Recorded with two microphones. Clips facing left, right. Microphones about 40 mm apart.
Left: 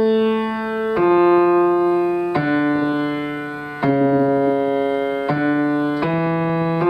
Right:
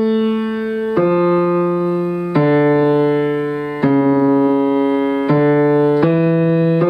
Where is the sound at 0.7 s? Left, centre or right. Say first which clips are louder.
Even; centre.